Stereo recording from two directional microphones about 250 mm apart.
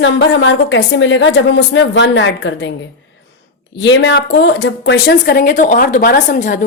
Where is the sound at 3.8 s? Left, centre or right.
Left.